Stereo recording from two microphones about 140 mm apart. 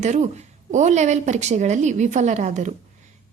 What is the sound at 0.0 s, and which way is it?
A woman's voice, 55° right (ahead or behind).